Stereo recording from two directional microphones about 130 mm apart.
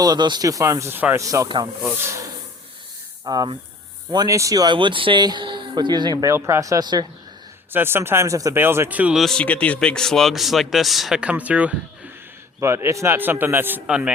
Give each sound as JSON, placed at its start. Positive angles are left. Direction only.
{"t": 0.0, "sound": "speech", "side_deg": -30}
{"t": 3.2, "sound": "speech", "side_deg": -30}
{"t": 6.3, "sound": "speech", "side_deg": -20}
{"t": 7.7, "sound": "speech", "side_deg": -15}
{"t": 9.2, "sound": "a man's voice", "side_deg": 5}